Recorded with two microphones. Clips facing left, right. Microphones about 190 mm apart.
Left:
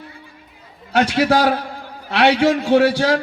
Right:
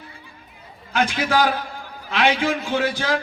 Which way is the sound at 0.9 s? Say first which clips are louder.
Left 5 dB; 75° left (ahead or behind).